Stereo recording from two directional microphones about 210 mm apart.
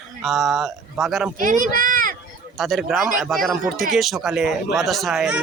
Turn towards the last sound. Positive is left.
turn(degrees=-5)  # may be behind; listen again after turning